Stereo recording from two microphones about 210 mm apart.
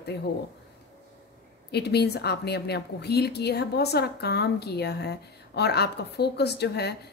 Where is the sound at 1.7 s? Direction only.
50° left (ahead or behind).